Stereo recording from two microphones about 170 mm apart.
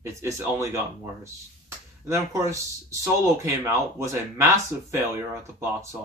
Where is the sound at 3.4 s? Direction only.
15° right (ahead or behind).